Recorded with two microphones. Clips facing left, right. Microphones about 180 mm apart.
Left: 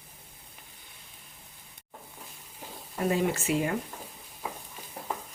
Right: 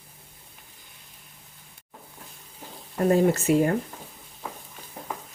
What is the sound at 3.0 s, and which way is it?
Speech, 45° right (ahead or behind).